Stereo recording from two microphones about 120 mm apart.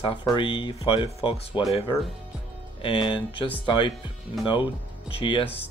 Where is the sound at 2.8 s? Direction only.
45° left (ahead or behind).